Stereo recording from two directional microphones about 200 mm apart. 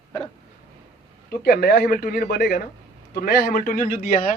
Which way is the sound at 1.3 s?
50° left (ahead or behind).